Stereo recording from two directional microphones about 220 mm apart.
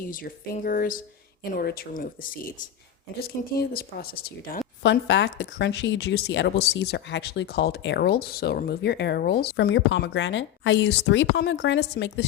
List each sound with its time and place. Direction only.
0.0 s speech: 40° left (ahead or behind); by 12.2 s 55° left (ahead or behind)